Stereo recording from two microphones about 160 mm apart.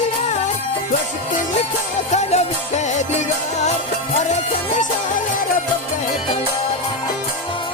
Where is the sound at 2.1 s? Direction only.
45° left (ahead or behind).